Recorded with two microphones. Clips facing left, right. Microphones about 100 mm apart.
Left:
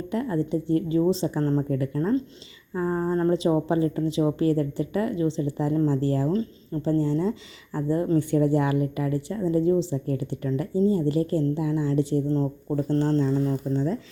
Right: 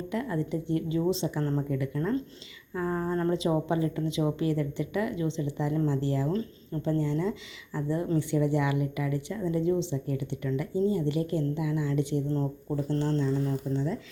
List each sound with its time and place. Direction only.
0.1 s speech: 30° left (ahead or behind)
12.7 s speech: 40° left (ahead or behind)